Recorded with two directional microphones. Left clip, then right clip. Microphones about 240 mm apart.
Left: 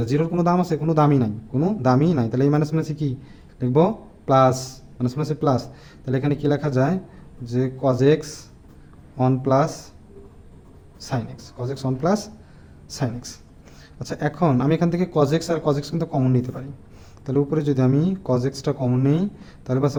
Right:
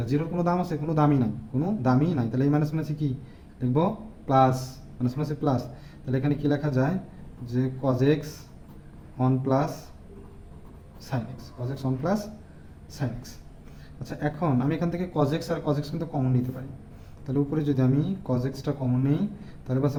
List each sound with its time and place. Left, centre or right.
0.0 s a man's voice: left
11.0 s a man's voice: left